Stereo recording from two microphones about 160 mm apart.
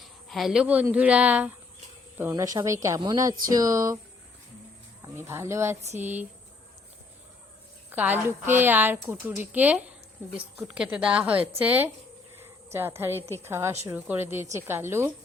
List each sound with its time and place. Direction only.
0.0 s speech: centre (ahead or behind)
2.3 s a woman's voice: 20° right (ahead or behind)
5.0 s a woman's voice: 15° right (ahead or behind)
7.9 s a woman's voice: 10° right (ahead or behind)